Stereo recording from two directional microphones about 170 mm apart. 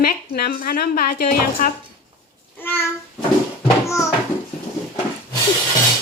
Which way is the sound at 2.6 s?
10° left (ahead or behind).